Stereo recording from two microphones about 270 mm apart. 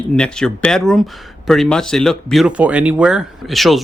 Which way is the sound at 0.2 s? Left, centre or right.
Centre.